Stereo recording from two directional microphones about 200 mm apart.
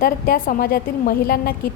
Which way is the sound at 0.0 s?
45° left (ahead or behind).